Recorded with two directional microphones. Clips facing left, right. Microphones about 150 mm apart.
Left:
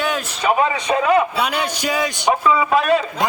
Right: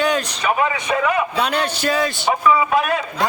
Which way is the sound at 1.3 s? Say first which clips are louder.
Right 1 dB; 10° left (ahead or behind).